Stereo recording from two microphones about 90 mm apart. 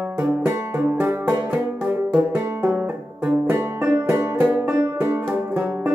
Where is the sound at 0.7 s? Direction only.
20° right (ahead or behind).